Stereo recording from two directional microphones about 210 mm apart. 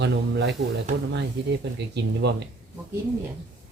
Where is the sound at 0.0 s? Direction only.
55° right (ahead or behind).